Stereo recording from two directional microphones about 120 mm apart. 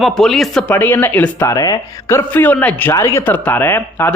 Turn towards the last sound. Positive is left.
turn(degrees=20)  # may be behind; listen again after turning